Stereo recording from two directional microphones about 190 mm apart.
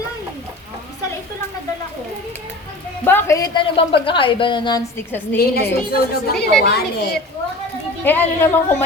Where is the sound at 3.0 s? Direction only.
10° left (ahead or behind).